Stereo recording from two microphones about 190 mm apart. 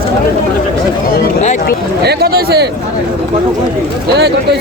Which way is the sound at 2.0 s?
60° right (ahead or behind).